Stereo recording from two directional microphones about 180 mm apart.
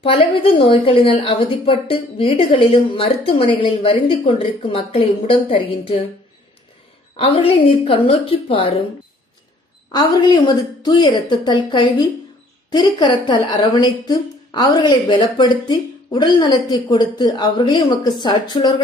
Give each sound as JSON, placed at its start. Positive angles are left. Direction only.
{"t": 0.0, "sound": "a woman's voice", "side_deg": 30}
{"t": 7.2, "sound": "a woman's voice", "side_deg": 30}
{"t": 10.4, "sound": "a woman's voice", "side_deg": 25}